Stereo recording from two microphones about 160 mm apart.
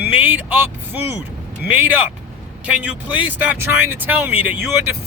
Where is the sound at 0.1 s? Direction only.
10° right (ahead or behind).